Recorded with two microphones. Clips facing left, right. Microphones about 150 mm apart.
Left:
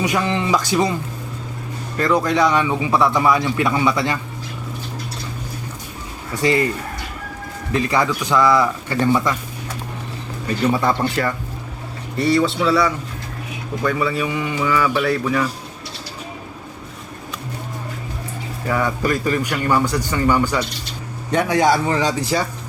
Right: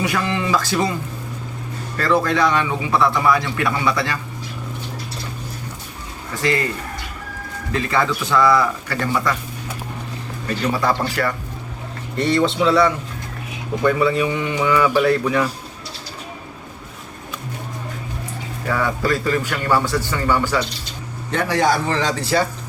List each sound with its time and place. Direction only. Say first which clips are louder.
0.0 s a man's voice: left 2 dB; 20° left (ahead or behind)
2.0 s a man's voice: left 1 dB; 15° left (ahead or behind)
6.4 s a man's voice: left 3 dB; 20° left (ahead or behind)
7.7 s a man's voice: left 1 dB; 20° left (ahead or behind)
10.8 s a man's voice: left 1 dB; 20° left (ahead or behind)
12.1 s a man's voice: left 1 dB; 5° left (ahead or behind)
18.7 s a man's voice: even; 15° left (ahead or behind)